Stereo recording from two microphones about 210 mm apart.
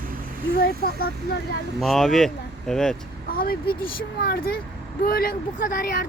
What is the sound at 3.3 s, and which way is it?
Speech, 45° left (ahead or behind).